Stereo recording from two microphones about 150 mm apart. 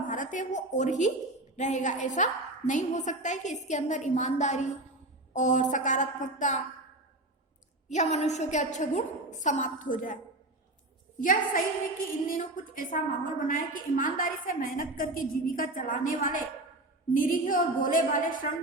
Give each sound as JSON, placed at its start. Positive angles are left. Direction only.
{"t": 0.1, "sound": "a woman's voice", "side_deg": 60}
{"t": 7.9, "sound": "a woman's voice", "side_deg": 50}
{"t": 11.2, "sound": "a woman's voice", "side_deg": 60}